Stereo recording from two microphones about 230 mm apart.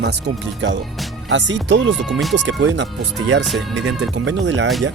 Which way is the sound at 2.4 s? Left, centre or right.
Right.